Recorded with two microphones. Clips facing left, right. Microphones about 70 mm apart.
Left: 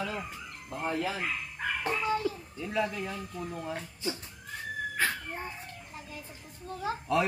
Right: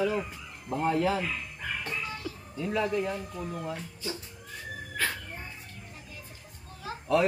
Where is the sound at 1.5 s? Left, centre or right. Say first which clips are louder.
Left 3 dB; left.